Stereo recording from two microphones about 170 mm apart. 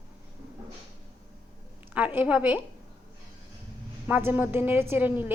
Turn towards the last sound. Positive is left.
turn(degrees=-10)  # may be behind; listen again after turning